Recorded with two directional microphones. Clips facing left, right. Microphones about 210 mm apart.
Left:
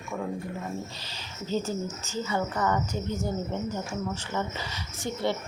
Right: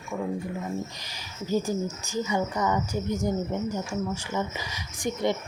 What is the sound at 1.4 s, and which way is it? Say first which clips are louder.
Speech: right 3 dB; 10° right (ahead or behind).